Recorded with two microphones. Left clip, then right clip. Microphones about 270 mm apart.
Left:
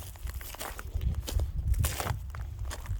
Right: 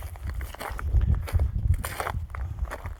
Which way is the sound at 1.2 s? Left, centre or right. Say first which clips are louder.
Right 3 dB; centre.